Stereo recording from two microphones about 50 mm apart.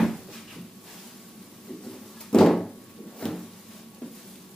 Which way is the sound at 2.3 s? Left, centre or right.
Centre.